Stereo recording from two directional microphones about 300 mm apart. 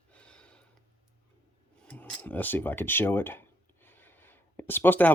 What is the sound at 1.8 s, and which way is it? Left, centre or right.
Speech, centre.